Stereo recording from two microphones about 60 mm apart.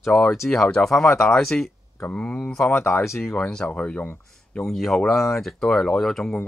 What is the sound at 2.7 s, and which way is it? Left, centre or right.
Speech, left.